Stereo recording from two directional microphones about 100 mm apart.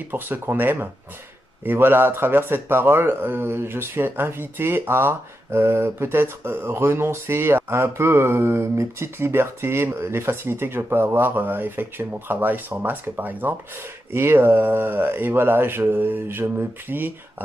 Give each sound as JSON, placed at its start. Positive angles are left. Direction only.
{"t": 0.1, "sound": "speech", "side_deg": -20}